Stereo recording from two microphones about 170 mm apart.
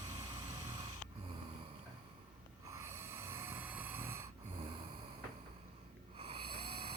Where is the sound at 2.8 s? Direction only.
15° right (ahead or behind).